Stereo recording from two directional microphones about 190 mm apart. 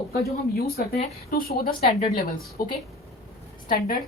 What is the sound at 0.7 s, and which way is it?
Speech, 50° left (ahead or behind).